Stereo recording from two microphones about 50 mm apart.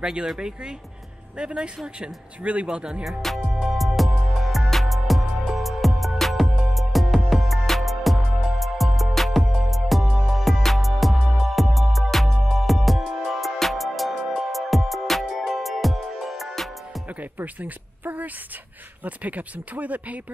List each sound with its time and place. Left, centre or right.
0.0 s speech: centre
3.0 s music: centre
17.2 s a sound: right
19.0 s speech: right